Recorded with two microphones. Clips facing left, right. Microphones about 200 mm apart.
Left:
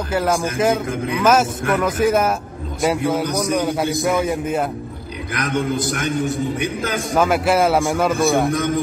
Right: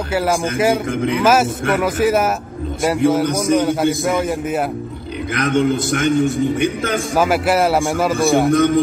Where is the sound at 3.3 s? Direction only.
25° right (ahead or behind).